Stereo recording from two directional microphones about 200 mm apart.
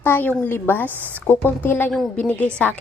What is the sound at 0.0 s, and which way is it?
A woman's voice, 10° left (ahead or behind).